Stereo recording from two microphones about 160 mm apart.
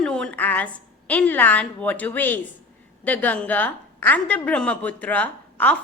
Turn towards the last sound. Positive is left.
turn(degrees=10)  # may be behind; listen again after turning